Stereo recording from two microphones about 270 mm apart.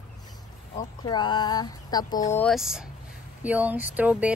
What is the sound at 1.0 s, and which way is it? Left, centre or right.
Speech, centre.